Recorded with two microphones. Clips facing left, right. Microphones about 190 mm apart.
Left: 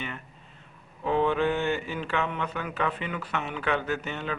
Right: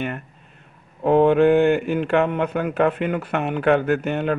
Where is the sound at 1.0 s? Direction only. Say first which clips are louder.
Right 10 dB; 55° right (ahead or behind).